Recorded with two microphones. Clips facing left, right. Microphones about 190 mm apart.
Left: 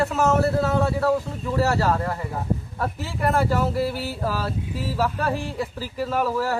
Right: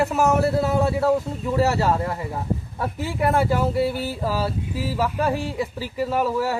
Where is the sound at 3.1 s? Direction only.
15° right (ahead or behind).